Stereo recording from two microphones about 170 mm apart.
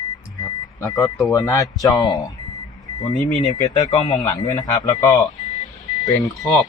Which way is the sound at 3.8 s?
45° left (ahead or behind).